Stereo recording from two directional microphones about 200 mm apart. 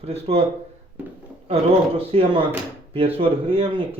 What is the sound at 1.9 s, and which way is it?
Speech, 30° right (ahead or behind).